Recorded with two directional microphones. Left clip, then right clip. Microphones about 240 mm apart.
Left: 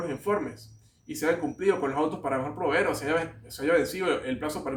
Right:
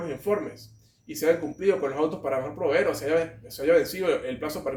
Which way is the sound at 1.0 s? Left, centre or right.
Centre.